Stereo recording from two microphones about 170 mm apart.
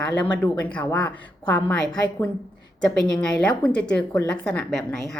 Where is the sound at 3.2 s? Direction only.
5° left (ahead or behind).